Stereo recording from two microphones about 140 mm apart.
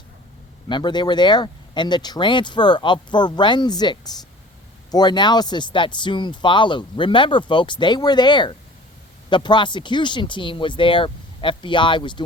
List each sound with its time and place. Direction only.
0.7 s speech: 35° left (ahead or behind)